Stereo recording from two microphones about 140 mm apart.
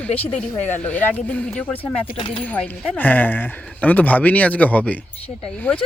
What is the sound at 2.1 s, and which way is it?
Speech, 40° left (ahead or behind).